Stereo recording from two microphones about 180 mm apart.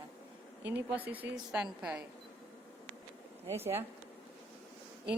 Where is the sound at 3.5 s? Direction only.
15° right (ahead or behind).